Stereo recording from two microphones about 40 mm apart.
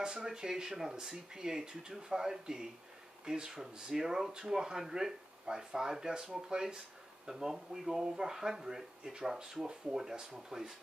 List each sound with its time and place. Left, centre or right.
0.0 s speech: centre